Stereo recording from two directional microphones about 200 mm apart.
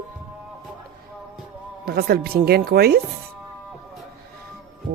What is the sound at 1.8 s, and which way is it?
Speech, 50° right (ahead or behind).